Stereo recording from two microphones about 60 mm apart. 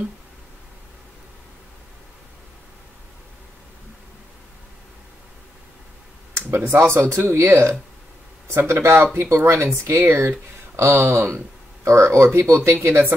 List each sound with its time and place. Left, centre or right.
6.3 s speech: right
7.3 s speech: right
9.8 s speech: right
10.1 s speech: right